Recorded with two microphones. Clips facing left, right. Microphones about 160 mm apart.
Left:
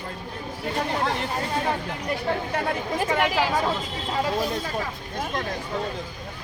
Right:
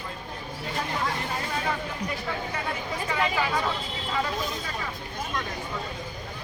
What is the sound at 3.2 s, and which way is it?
Speech, 85° left.